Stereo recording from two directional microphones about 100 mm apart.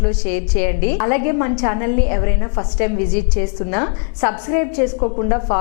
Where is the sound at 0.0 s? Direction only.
15° left (ahead or behind).